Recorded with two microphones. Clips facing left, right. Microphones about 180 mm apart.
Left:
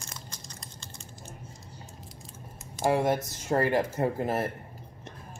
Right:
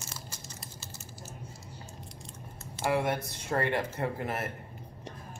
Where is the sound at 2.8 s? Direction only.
25° left (ahead or behind).